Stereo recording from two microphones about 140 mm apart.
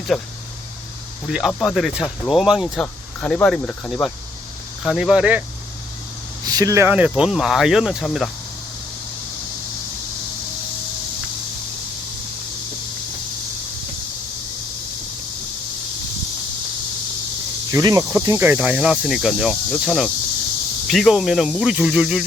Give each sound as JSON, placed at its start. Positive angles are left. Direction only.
{"t": 0.1, "sound": "speech", "side_deg": 0}
{"t": 1.3, "sound": "speech", "side_deg": 0}
{"t": 6.4, "sound": "speech", "side_deg": -25}
{"t": 6.8, "sound": "speech", "side_deg": -10}
{"t": 17.7, "sound": "speech", "side_deg": -25}